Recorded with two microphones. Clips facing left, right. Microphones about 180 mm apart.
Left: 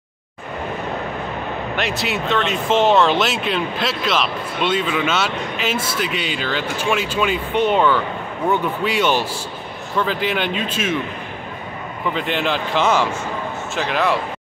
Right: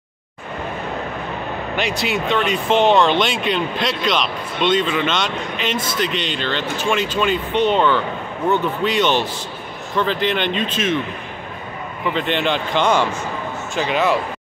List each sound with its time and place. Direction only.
1.8 s speech: centre (ahead or behind)
12.1 s speech: 5° left (ahead or behind)